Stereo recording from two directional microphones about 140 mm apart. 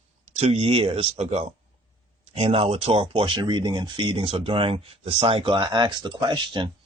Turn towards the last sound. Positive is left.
turn(degrees=-35)  # may be behind; listen again after turning